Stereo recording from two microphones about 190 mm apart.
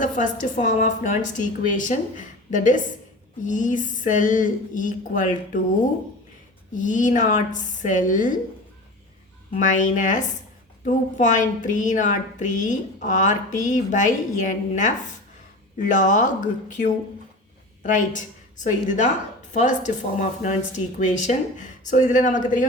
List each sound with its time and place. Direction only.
0.0 s a woman's voice: 40° left (ahead or behind)
6.7 s a woman's voice: 40° left (ahead or behind)
9.5 s a woman's voice: 40° left (ahead or behind)